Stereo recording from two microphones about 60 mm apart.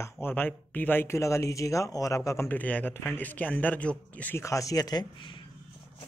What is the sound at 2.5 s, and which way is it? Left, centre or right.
Speech, left.